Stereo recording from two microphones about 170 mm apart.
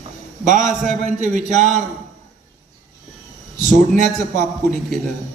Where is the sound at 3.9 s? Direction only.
45° right (ahead or behind).